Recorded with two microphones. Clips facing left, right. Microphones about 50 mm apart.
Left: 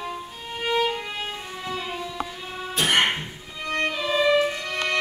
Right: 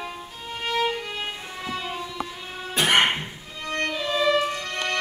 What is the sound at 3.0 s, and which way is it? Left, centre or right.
Music, centre.